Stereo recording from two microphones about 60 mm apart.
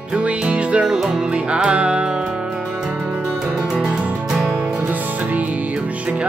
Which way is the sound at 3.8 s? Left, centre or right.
Centre.